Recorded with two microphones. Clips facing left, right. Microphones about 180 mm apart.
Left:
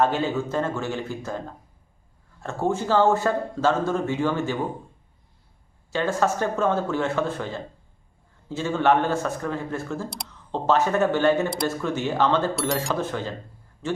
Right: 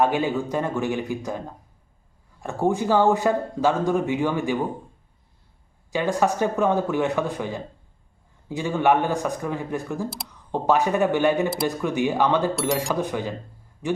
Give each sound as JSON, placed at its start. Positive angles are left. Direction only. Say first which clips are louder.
{"t": 0.0, "sound": "a man's voice", "louder": "right 1 dB", "side_deg": -15}
{"t": 5.9, "sound": "a man's voice", "louder": "right 1 dB", "side_deg": -15}
{"t": 12.5, "sound": "speech", "louder": "right 2 dB", "side_deg": 0}
{"t": 12.9, "sound": "a man's voice", "louder": "right 2 dB", "side_deg": -15}